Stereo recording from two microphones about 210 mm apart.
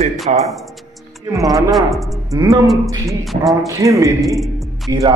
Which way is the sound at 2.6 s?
Centre (ahead or behind).